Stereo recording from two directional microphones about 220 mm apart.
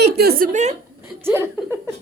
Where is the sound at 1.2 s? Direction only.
10° right (ahead or behind).